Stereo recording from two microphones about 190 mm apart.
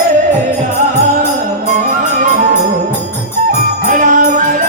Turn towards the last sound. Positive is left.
turn(degrees=-45)  # may be behind; listen again after turning